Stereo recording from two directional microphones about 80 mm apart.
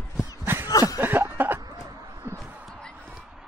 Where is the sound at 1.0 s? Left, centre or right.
Right.